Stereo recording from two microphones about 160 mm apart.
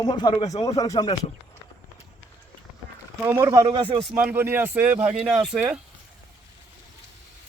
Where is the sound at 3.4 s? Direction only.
30° right (ahead or behind).